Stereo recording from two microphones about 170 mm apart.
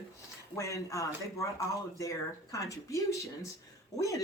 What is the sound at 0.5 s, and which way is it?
Speech, 15° left (ahead or behind).